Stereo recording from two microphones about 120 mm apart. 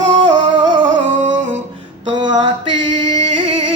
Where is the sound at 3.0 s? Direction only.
45° right (ahead or behind).